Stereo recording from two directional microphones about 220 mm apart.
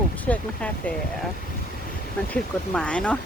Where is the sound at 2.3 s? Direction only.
5° left (ahead or behind).